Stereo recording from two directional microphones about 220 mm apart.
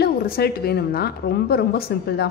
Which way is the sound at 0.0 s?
45° left (ahead or behind).